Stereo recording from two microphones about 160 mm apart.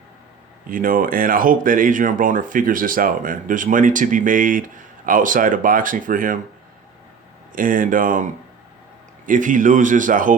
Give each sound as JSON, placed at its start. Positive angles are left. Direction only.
{"t": 0.7, "sound": "speech", "side_deg": -60}
{"t": 7.5, "sound": "speech", "side_deg": -60}
{"t": 9.2, "sound": "speech", "side_deg": -55}